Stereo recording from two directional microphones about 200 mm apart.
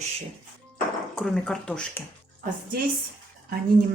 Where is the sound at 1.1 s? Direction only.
Centre (ahead or behind).